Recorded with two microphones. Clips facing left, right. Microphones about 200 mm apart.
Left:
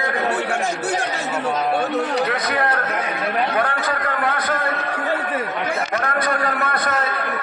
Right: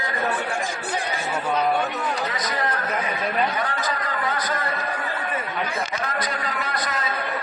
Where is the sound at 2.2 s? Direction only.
60° left (ahead or behind).